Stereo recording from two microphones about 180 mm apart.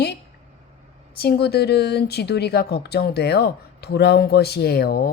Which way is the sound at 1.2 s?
60° left (ahead or behind).